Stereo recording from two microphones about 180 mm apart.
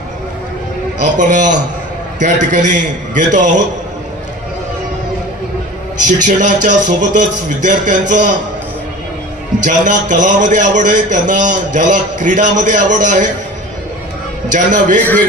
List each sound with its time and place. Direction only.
1.0 s a man's voice: 45° right (ahead or behind)
6.0 s a man's voice: 45° right (ahead or behind)
9.7 s a man's voice: 45° right (ahead or behind)
14.5 s a man's voice: 45° right (ahead or behind)